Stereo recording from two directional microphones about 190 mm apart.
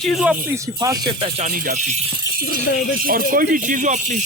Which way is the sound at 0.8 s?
20° right (ahead or behind).